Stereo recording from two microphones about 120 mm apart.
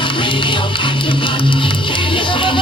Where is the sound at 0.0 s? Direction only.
45° left (ahead or behind).